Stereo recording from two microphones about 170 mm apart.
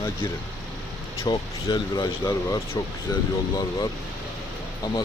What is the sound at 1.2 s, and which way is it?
Speech, 25° left (ahead or behind).